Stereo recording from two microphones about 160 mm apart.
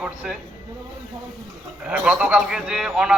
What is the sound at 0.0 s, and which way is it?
Speech, 5° right (ahead or behind).